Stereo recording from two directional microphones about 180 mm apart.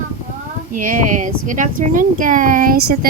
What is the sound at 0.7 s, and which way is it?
A woman's voice, 50° right (ahead or behind).